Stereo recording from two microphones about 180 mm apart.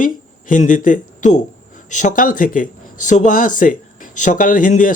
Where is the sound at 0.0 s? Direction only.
45° left (ahead or behind).